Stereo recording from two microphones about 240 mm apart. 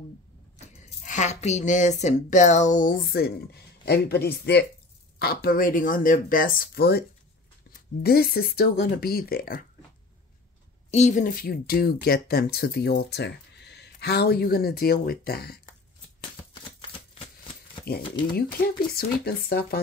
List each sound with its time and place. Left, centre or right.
0.6 s speech: left
10.9 s speech: left
18.0 s speech: centre
18.3 s speech: left